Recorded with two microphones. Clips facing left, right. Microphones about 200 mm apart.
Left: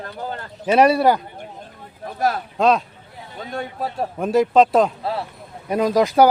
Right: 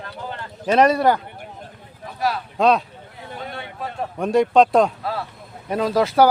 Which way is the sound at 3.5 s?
40° left (ahead or behind).